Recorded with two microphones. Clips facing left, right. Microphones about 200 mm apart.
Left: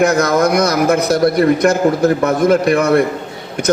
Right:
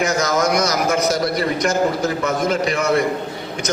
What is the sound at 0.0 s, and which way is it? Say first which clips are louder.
A man's voice: left 6 dB; 55° left (ahead or behind).